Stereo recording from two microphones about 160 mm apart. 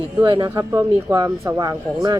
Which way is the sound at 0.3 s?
25° right (ahead or behind).